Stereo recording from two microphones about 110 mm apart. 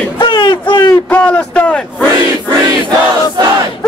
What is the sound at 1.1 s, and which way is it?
Speech, 10° left (ahead or behind).